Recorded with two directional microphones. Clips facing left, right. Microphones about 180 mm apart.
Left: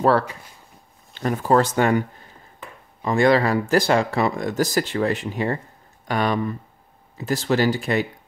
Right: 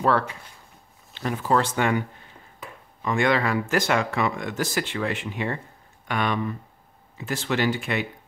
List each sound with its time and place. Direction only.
1.1 s speech: 45° left (ahead or behind)